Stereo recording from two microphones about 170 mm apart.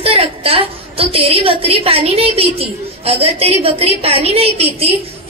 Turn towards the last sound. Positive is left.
turn(degrees=-35)  # may be behind; listen again after turning